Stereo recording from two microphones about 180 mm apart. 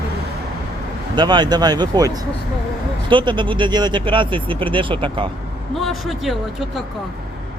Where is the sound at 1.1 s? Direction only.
25° right (ahead or behind).